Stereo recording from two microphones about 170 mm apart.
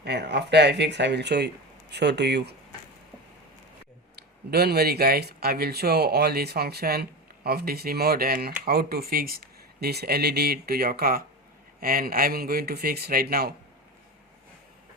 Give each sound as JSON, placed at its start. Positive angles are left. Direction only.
{"t": 0.0, "sound": "speech", "side_deg": -80}
{"t": 4.1, "sound": "speech", "side_deg": -70}